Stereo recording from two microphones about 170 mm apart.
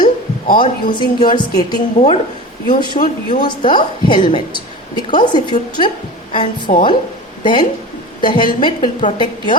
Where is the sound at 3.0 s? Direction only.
40° left (ahead or behind).